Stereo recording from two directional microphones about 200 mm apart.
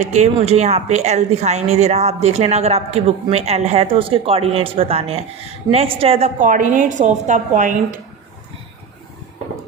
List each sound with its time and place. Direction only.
0.0 s speech: 35° right (ahead or behind)
5.7 s a woman's voice: 20° right (ahead or behind)
6.0 s speech: 30° right (ahead or behind)